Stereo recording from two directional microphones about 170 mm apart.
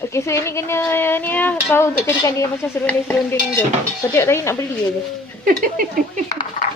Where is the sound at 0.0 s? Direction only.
15° left (ahead or behind).